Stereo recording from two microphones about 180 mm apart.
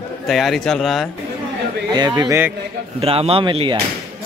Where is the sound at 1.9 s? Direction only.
25° right (ahead or behind).